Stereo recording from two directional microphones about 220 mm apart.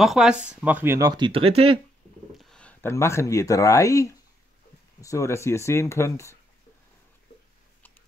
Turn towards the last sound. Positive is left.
turn(degrees=10)  # may be behind; listen again after turning